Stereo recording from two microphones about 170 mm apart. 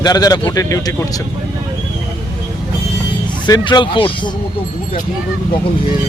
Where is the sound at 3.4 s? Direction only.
25° left (ahead or behind).